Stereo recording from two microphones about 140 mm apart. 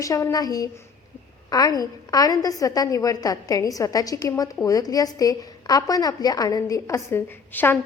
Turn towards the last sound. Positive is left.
turn(degrees=15)  # may be behind; listen again after turning